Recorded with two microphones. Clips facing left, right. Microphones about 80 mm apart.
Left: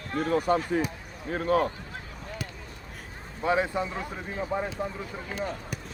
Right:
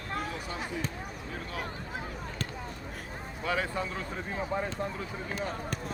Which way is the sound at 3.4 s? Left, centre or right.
Left.